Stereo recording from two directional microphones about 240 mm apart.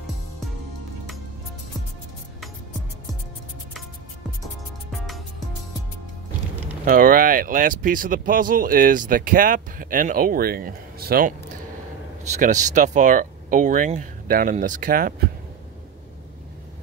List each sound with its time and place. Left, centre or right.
4.9 s music: centre
6.8 s speech: right